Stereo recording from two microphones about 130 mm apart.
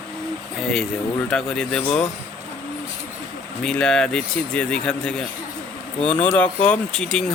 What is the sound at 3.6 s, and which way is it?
Speech, 5° left (ahead or behind).